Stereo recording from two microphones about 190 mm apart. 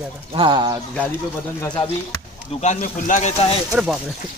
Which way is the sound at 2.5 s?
40° left (ahead or behind).